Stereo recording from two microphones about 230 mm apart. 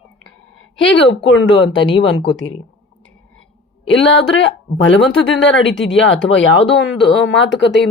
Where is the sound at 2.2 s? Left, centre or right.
Left.